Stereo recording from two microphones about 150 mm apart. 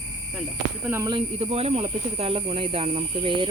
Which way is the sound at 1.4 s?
40° right (ahead or behind).